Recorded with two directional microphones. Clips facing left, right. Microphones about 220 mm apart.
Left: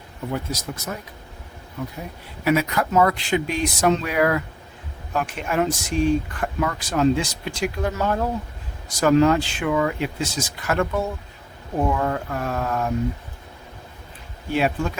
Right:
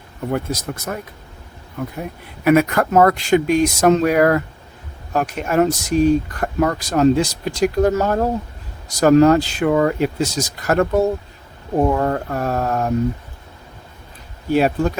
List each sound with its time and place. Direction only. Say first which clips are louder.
0.3 s speech: right 5 dB; 55° right (ahead or behind); by 12.9 s 40° right (ahead or behind)
14.5 s speech: right 6 dB; 40° right (ahead or behind)